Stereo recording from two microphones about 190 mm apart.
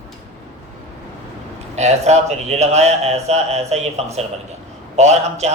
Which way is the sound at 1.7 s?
35° right (ahead or behind).